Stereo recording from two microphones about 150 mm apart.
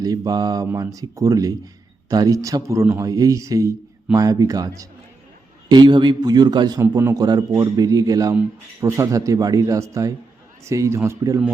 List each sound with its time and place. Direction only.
0.0 s a man's voice: 25° right (ahead or behind)